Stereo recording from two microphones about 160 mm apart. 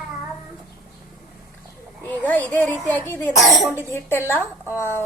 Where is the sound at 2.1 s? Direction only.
10° left (ahead or behind).